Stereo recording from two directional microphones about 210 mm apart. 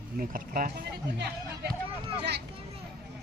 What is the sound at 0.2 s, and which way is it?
Speech, 40° right (ahead or behind).